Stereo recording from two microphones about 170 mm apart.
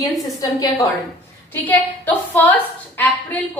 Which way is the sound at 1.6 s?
10° left (ahead or behind).